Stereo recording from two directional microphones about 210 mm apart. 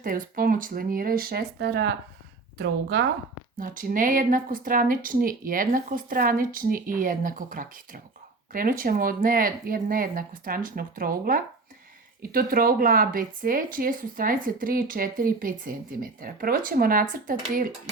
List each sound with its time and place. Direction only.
0.0 s speech: 40° right (ahead or behind)
3.6 s speech: 40° right (ahead or behind)